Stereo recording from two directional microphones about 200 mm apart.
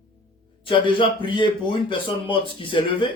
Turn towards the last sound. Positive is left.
turn(degrees=25)  # may be behind; listen again after turning